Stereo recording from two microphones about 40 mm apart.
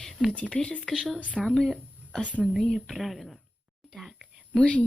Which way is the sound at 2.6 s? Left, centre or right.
Centre.